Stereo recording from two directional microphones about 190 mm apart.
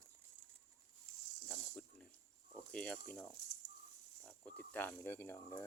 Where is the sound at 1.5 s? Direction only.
5° left (ahead or behind).